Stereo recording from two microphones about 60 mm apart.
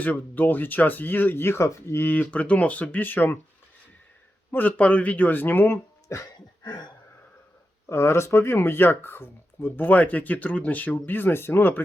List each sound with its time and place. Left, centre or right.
0.0 s speech: left
2.0 s speech: left
4.5 s speech: left
6.1 s a sound: left
7.9 s speech: left